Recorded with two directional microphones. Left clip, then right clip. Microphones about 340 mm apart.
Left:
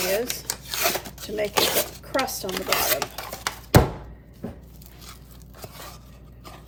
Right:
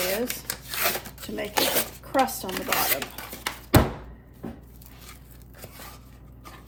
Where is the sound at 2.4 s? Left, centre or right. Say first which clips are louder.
Left 2 dB; centre.